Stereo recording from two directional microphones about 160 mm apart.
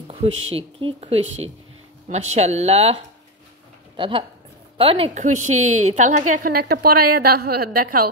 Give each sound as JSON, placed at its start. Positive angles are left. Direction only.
{"t": 0.1, "sound": "a woman's voice", "side_deg": -35}
{"t": 5.2, "sound": "a woman's voice", "side_deg": -50}
{"t": 6.6, "sound": "a woman's voice", "side_deg": -75}